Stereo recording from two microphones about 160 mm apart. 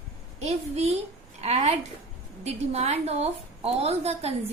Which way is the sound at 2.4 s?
40° right (ahead or behind).